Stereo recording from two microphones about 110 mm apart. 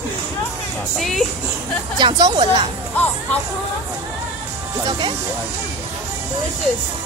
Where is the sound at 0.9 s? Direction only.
Centre (ahead or behind).